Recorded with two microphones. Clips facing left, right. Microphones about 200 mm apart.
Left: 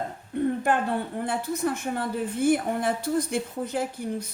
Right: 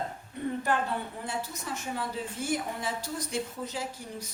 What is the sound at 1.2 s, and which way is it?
A woman's voice, 55° left (ahead or behind).